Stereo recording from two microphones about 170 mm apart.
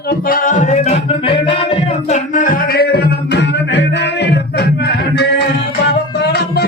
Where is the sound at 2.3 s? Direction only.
50° left (ahead or behind).